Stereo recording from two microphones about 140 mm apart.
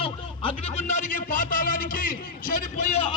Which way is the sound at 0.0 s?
45° left (ahead or behind).